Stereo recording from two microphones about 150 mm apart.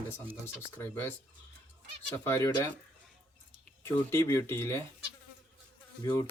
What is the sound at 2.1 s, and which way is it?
Speech, 15° left (ahead or behind).